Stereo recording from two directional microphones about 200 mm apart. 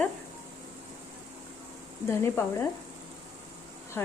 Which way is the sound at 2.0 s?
10° left (ahead or behind).